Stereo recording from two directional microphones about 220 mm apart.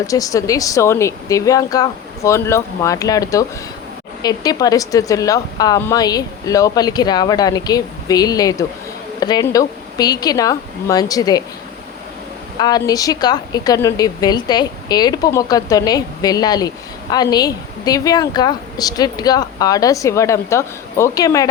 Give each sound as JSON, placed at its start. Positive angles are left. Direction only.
{"t": 0.1, "sound": "a woman's voice", "side_deg": 15}
{"t": 12.5, "sound": "a woman's voice", "side_deg": 20}